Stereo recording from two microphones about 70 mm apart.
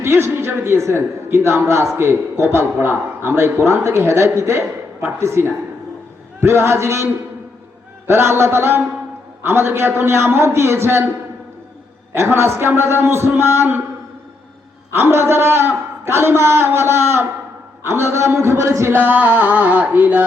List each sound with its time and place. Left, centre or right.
0.0 s a man's voice: right
12.1 s a man's voice: right
14.9 s a man's voice: right
18.9 s music: right